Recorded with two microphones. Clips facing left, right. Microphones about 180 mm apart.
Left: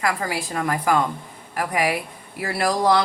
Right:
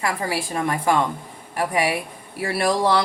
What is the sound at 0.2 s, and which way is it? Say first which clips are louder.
Speech: right 1 dB; 30° right (ahead or behind).